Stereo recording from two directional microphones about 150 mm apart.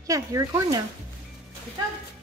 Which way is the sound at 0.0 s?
20° right (ahead or behind).